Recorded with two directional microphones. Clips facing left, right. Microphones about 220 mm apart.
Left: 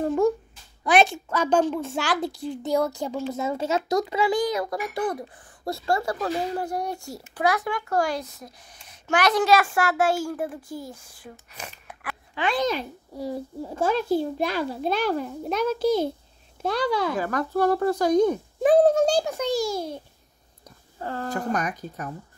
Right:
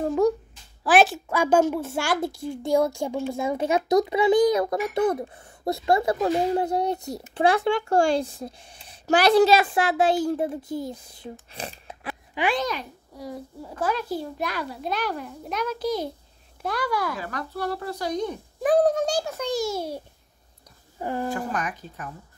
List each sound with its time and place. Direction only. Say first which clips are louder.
0.0 s babbling: even; centre (ahead or behind)
0.8 s a child's voice: right 1 dB; 5° right (ahead or behind); by 12.2 s 25° right (ahead or behind)
12.5 s a child's voice: left 3 dB; 25° left (ahead or behind)
17.2 s speech: left 7 dB; 45° left (ahead or behind)
18.6 s a child's voice: left 3 dB; 25° left (ahead or behind)
21.0 s speech: right 3 dB; 15° right (ahead or behind)
21.3 s speech: left 2 dB; 40° left (ahead or behind)